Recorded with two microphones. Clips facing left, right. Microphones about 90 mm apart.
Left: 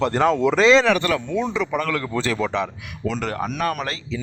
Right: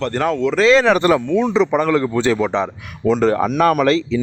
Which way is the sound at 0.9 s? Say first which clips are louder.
Right 7 dB; 30° right (ahead or behind).